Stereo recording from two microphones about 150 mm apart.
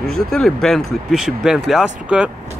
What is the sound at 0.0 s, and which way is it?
Speech, centre (ahead or behind).